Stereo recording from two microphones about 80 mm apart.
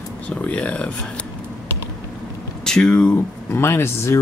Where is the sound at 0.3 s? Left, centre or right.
Centre.